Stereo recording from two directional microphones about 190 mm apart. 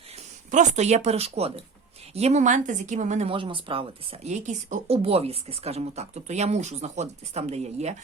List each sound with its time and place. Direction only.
0.5 s a woman's voice: 40° right (ahead or behind)